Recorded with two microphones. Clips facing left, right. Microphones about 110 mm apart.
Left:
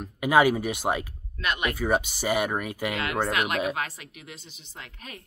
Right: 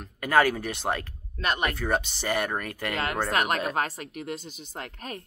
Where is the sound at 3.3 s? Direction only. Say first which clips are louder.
Even; 40° right (ahead or behind).